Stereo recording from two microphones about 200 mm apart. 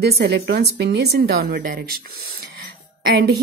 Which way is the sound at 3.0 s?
55° right (ahead or behind).